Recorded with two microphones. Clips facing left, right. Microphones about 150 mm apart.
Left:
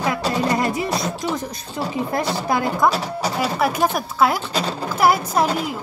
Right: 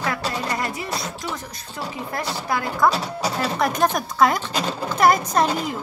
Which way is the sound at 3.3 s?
10° left (ahead or behind).